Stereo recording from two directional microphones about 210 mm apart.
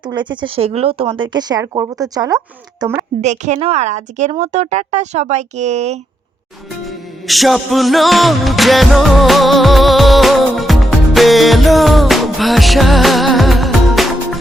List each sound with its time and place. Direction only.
0.0 s speech: 20° right (ahead or behind)
3.2 s speech: 35° right (ahead or behind)
6.8 s music: centre (ahead or behind)